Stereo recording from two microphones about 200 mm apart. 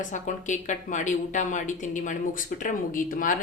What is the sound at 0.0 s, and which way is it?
A woman's voice, 40° left (ahead or behind).